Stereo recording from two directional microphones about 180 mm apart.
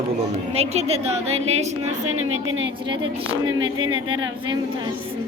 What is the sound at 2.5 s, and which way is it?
Speech, 90° right.